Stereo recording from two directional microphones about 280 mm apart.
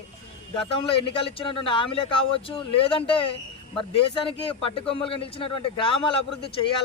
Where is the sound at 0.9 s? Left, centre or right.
Centre.